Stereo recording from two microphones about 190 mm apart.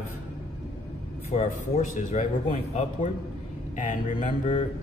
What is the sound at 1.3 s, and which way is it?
A man's voice, 35° left (ahead or behind).